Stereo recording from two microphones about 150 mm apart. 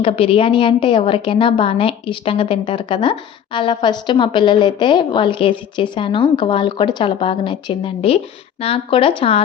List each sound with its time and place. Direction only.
0.0 s a woman's voice: 40° left (ahead or behind)